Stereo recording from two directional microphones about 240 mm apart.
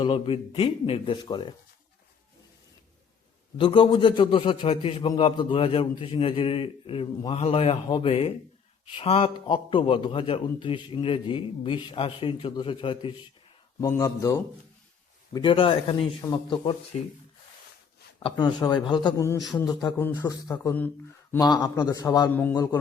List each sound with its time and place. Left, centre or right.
0.0 s a man's voice: left
3.6 s a man's voice: centre
18.2 s a man's voice: centre
19.4 s speech: centre
19.6 s a man's voice: centre